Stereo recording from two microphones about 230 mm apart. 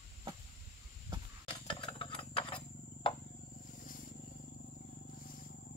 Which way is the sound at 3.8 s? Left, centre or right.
Left.